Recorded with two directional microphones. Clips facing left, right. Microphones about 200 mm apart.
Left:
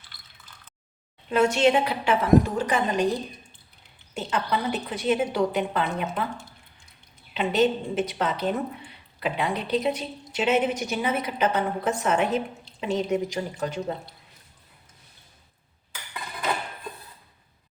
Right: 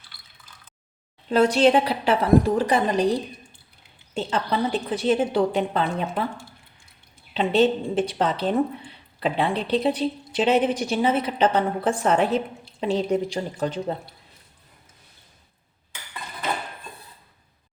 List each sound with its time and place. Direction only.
1.3 s a woman's voice: 35° right (ahead or behind)
4.1 s a woman's voice: 30° right (ahead or behind)
7.3 s a woman's voice: 30° right (ahead or behind)